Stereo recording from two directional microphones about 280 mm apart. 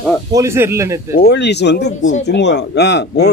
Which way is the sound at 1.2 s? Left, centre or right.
Left.